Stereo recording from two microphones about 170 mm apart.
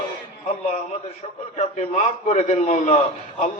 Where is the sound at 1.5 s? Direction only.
45° left (ahead or behind).